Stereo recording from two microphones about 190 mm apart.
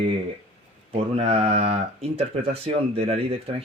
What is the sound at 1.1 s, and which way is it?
Speech, 35° right (ahead or behind).